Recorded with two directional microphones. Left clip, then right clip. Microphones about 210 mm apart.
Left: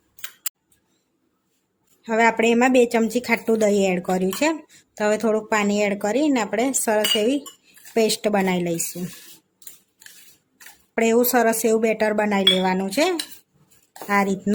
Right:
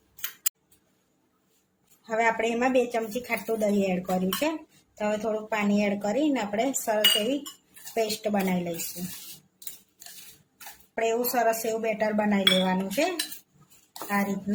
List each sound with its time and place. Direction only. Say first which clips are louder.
2.0 s a woman's voice: left 7 dB; 40° left (ahead or behind)
10.9 s a woman's voice: left 7 dB; 55° left (ahead or behind)